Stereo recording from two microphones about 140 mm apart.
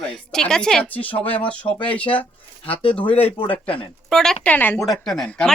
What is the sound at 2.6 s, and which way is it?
Speech, 40° left (ahead or behind).